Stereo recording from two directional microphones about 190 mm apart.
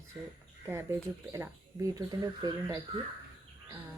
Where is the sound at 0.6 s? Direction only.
15° right (ahead or behind).